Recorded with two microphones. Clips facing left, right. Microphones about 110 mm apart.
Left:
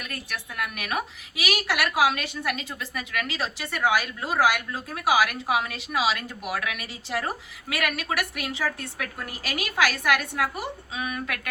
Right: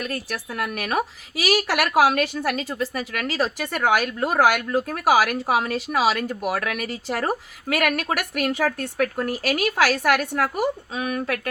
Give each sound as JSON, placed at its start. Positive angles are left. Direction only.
{"t": 0.0, "sound": "a woman's voice", "side_deg": -40}